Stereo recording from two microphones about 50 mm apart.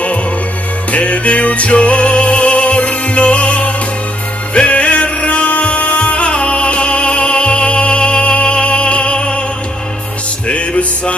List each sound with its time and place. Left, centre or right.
0.9 s music: left
10.5 s music: left